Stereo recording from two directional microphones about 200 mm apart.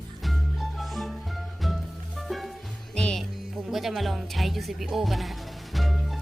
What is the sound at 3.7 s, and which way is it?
Speech, centre (ahead or behind).